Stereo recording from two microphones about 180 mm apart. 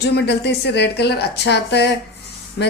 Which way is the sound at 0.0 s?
65° left (ahead or behind).